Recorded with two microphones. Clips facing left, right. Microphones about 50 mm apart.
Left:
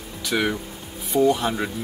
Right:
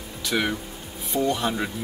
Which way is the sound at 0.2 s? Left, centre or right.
Centre.